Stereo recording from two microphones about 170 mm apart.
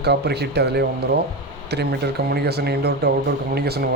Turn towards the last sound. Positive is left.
turn(degrees=-70)  # may be behind; listen again after turning